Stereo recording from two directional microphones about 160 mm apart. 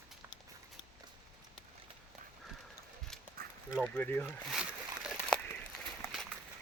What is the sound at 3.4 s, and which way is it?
Duck, 70° right (ahead or behind).